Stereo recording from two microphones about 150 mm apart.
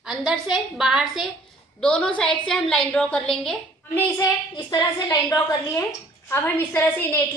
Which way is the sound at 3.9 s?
20° left (ahead or behind).